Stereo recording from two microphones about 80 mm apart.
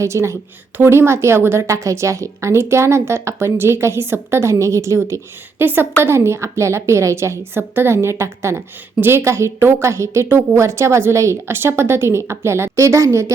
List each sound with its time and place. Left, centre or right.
0.0 s a woman's voice: right